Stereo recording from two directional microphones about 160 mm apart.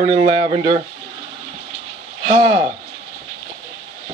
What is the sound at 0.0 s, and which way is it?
Speech, 40° right (ahead or behind).